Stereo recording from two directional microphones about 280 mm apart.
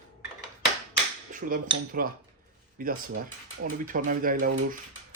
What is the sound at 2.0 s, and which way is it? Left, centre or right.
Speech, right.